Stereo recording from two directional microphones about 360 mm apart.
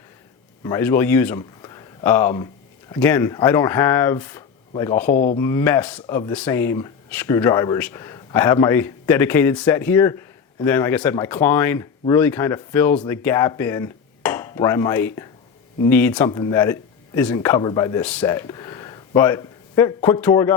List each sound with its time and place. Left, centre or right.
0.6 s speech: centre
5.1 s speech: left
5.4 s speech: centre